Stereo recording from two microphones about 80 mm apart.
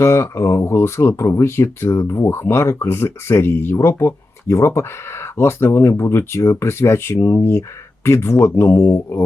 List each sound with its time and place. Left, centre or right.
0.0 s speech: left